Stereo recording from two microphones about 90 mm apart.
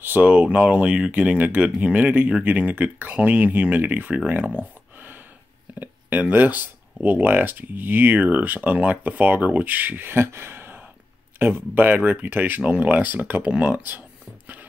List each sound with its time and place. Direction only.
0.0 s speech: 20° right (ahead or behind)
5.8 s speech: 15° right (ahead or behind)